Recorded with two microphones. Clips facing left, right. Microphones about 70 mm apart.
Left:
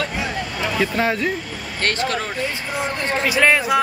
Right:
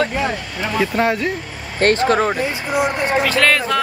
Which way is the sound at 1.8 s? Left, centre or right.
Right.